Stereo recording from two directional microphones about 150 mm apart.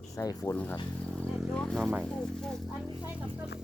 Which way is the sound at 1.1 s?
5° left (ahead or behind).